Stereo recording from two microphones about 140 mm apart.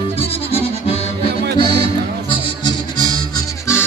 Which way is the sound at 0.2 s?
45° left (ahead or behind).